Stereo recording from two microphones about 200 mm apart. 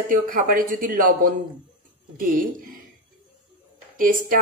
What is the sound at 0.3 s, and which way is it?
Speech, 45° right (ahead or behind).